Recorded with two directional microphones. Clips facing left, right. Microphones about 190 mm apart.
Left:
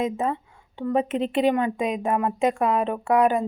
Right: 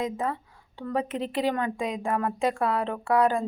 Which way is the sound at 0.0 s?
25° left (ahead or behind).